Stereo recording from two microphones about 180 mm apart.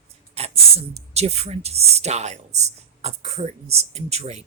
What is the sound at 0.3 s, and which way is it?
Speech, 35° right (ahead or behind).